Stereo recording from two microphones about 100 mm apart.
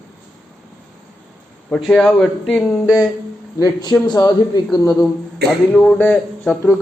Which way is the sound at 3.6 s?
45° left (ahead or behind).